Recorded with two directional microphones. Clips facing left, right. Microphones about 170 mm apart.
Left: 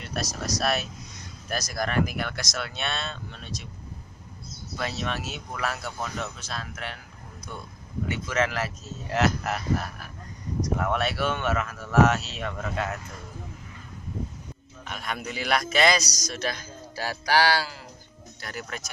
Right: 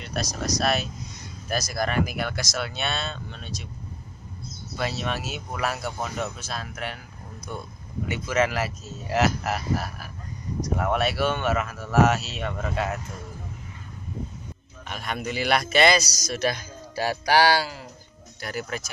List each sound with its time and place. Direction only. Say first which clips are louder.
0.0 s a man's voice: right 2 dB; 5° left (ahead or behind)
4.7 s a man's voice: right 2 dB; 5° right (ahead or behind)
5.6 s speech: right 3 dB; 15° right (ahead or behind)
8.1 s a man's voice: right 3 dB; 10° right (ahead or behind)
14.9 s a man's voice: right 3 dB; centre (ahead or behind)